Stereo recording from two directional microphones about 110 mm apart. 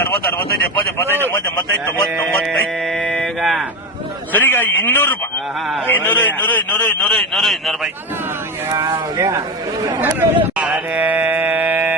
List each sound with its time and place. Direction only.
0.8 s a man's voice: 20° left (ahead or behind)
3.1 s speech: centre (ahead or behind)
4.3 s a man's voice: 15° left (ahead or behind)
7.3 s a man's voice: centre (ahead or behind)
8.7 s speech: 35° right (ahead or behind)
10.0 s a sound: 15° right (ahead or behind)
10.7 s mantra: 15° right (ahead or behind)